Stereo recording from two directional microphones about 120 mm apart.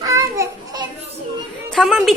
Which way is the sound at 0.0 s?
25° right (ahead or behind).